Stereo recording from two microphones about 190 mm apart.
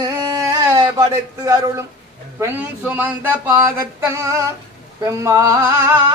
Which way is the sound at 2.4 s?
10° right (ahead or behind).